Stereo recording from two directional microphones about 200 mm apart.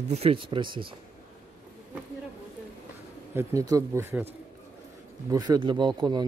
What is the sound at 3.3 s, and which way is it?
Speech, 15° right (ahead or behind).